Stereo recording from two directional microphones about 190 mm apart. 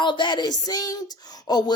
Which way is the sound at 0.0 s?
25° left (ahead or behind).